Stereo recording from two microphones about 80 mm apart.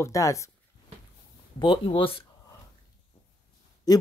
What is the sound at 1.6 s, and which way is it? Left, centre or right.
Speech, left.